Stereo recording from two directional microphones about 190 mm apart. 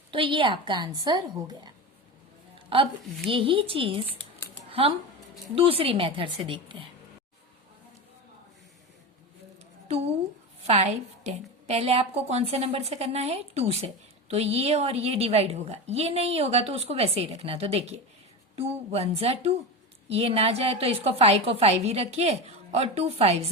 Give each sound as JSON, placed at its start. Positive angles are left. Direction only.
{"t": 0.1, "sound": "a woman's voice", "side_deg": -25}
{"t": 3.2, "sound": "a woman's voice", "side_deg": -30}
{"t": 10.7, "sound": "a woman's voice", "side_deg": -35}